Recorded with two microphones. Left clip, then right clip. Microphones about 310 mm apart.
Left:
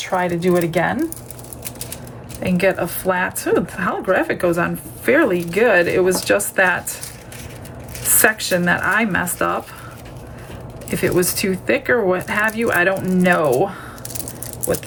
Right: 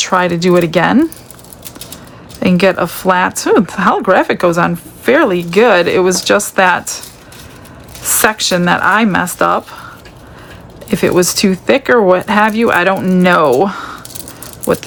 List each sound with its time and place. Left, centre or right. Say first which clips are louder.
0.0 s speech: right 7 dB; right
2.4 s speech: right 7 dB; centre
8.2 s speech: right 5 dB; centre
10.8 s speech: right 7 dB; centre